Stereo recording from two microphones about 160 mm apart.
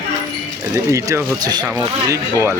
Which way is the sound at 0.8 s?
20° right (ahead or behind).